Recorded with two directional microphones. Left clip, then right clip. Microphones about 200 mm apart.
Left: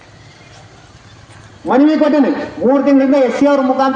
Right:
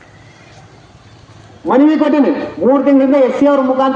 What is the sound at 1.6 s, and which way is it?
A man's voice, 35° left (ahead or behind).